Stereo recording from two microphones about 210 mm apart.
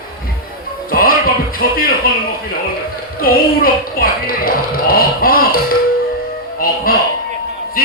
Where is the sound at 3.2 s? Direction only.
45° left (ahead or behind).